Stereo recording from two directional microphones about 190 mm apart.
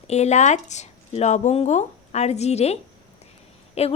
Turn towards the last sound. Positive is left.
turn(degrees=35)  # may be behind; listen again after turning